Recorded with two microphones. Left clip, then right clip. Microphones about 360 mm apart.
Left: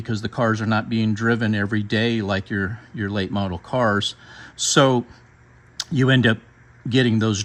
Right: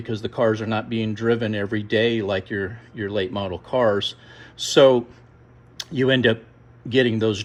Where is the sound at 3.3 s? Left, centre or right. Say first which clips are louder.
Left 1 dB; centre.